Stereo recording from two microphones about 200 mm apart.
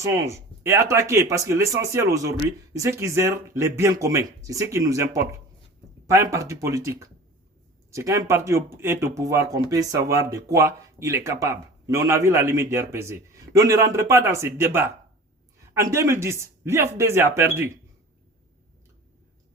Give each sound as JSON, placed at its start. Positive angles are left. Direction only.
{"t": 0.0, "sound": "speech", "side_deg": -15}